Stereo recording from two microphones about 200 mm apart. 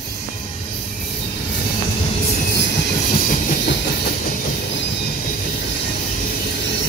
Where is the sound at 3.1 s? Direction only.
45° left (ahead or behind).